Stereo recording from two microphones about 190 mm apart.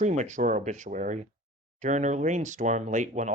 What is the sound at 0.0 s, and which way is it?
Speech, 40° right (ahead or behind).